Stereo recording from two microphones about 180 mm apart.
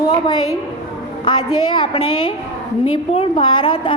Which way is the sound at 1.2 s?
25° left (ahead or behind).